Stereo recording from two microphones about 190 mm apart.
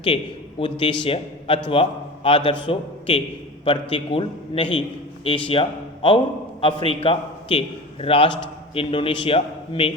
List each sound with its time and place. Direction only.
0.6 s a man's voice: 25° left (ahead or behind)